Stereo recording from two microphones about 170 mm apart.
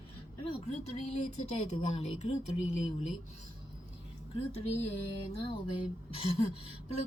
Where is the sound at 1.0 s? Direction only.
40° left (ahead or behind).